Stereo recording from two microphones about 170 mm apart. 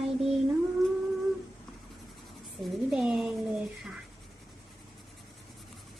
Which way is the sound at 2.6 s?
5° right (ahead or behind).